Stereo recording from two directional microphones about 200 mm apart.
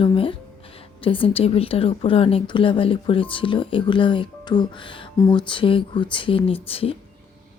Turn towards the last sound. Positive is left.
turn(degrees=30)  # may be behind; listen again after turning